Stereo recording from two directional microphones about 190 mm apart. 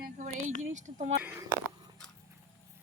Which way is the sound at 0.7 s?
40° right (ahead or behind).